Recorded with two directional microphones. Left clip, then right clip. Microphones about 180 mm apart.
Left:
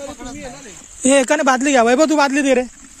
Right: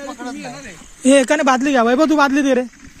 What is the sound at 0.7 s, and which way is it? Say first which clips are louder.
Speech: right 2 dB; 50° left (ahead or behind).